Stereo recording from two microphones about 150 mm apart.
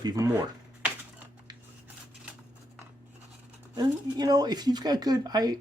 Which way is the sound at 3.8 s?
25° right (ahead or behind).